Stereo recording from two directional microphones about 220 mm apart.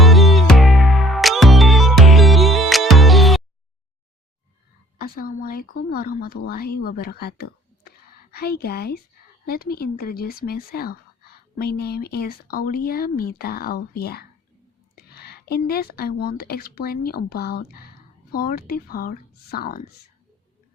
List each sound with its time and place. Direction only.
0.0 s music: centre (ahead or behind)
4.9 s speech: 40° left (ahead or behind)
7.9 s a sound: 45° left (ahead or behind)
9.5 s speech: 45° left (ahead or behind)